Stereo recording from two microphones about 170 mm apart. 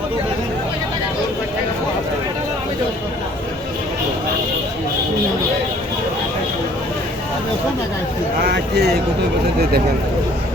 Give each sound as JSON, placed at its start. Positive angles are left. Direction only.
{"t": 8.4, "sound": "speech", "side_deg": -75}